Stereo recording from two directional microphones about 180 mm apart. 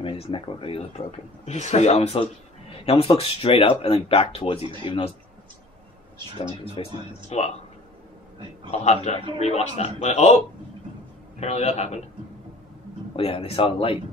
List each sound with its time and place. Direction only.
0.0 s speech: 30° left (ahead or behind)
6.3 s speech: 30° left (ahead or behind)
8.6 s speech: 35° left (ahead or behind)
11.3 s speech: 35° left (ahead or behind)
13.1 s speech: 30° left (ahead or behind)